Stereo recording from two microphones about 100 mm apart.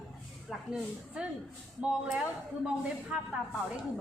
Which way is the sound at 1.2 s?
10° right (ahead or behind).